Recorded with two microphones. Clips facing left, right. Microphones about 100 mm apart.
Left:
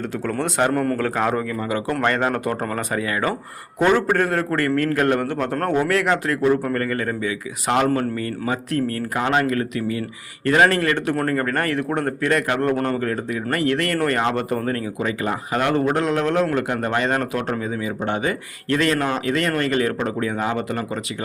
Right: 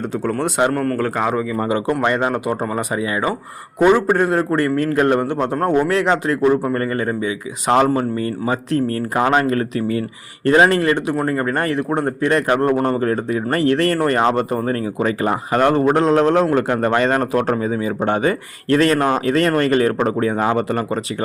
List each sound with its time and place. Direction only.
0.1 s speech: 15° right (ahead or behind)
0.7 s a man's voice: centre (ahead or behind)
1.6 s a man's voice: 25° right (ahead or behind); by 21.0 s 40° right (ahead or behind)